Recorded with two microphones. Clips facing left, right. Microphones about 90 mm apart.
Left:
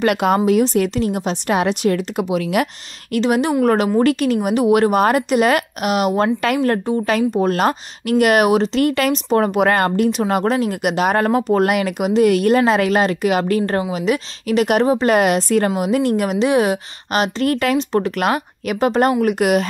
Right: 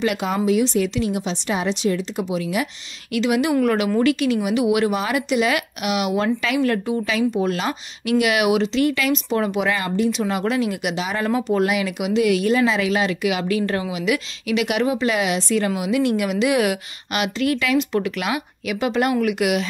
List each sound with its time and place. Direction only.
0.0 s speech: 60° left (ahead or behind)
3.1 s a woman's voice: 40° left (ahead or behind)